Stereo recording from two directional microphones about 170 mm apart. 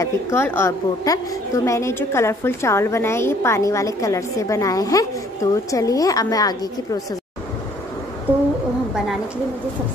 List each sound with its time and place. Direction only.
0.0 s a woman's voice: 15° left (ahead or behind)